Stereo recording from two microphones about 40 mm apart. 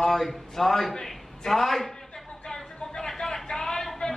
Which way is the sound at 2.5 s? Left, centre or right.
Centre.